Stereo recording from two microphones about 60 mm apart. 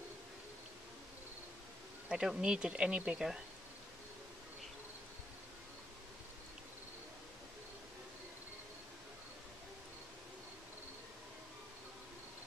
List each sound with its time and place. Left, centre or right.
2.0 s speech: centre